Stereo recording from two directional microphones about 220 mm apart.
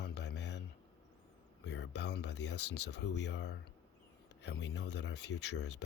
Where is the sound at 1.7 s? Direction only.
50° left (ahead or behind).